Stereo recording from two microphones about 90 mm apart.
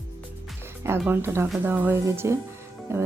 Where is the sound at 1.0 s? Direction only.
25° right (ahead or behind).